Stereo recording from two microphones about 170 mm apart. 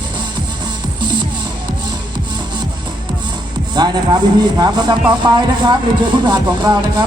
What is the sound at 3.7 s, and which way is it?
Speech, 25° right (ahead or behind).